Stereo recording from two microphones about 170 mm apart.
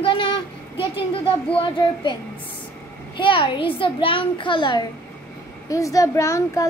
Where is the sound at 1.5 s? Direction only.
30° left (ahead or behind).